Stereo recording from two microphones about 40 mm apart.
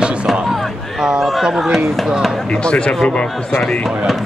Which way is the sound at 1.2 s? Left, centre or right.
Centre.